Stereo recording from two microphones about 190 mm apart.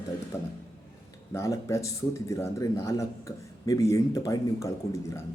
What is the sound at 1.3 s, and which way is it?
A man's voice, 15° left (ahead or behind).